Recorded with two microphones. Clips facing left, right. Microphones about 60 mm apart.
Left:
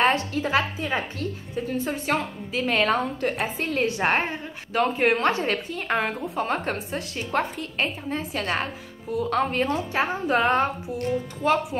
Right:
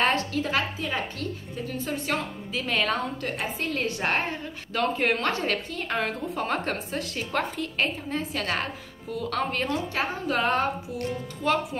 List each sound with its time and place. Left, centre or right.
0.3 s a woman's voice: left
2.1 s a woman's voice: centre
3.5 s a woman's voice: left
6.2 s a woman's voice: centre; by 10.7 s left
11.1 s a woman's voice: centre